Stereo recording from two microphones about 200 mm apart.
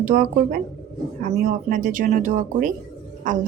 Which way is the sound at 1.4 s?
45° right (ahead or behind).